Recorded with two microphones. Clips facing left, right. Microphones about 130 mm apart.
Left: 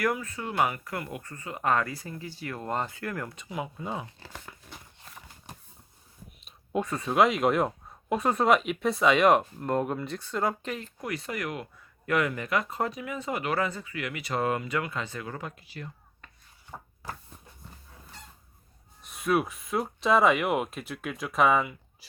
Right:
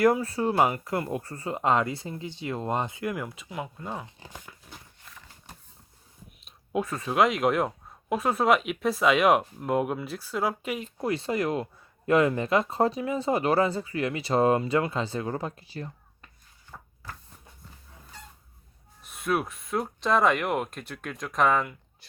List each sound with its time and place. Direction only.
0.0 s speech: 30° right (ahead or behind); by 4.1 s 5° left (ahead or behind)
6.4 s speech: centre (ahead or behind)
10.9 s speech: 30° right (ahead or behind)
16.7 s a sound: 25° left (ahead or behind)
19.0 s speech: centre (ahead or behind)